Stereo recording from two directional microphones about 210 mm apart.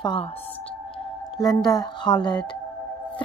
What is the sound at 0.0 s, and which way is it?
Speech, 20° left (ahead or behind).